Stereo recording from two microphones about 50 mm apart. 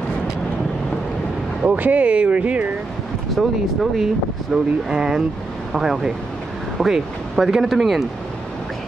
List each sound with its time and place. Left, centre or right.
1.8 s speech: right
3.3 s speech: centre